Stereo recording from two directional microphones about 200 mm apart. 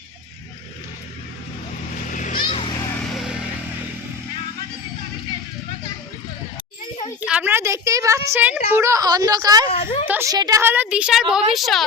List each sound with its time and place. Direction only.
2.0 s vehicle: 40° left (ahead or behind)
2.5 s children playing: 25° left (ahead or behind)
7.3 s a woman's voice: 10° right (ahead or behind)
9.6 s a woman's voice: 30° left (ahead or behind)
10.1 s a woman's voice: 15° right (ahead or behind)